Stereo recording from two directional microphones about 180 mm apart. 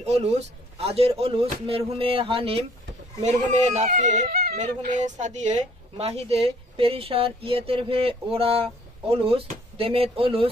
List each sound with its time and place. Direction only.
0.0 s a woman's voice: 35° right (ahead or behind)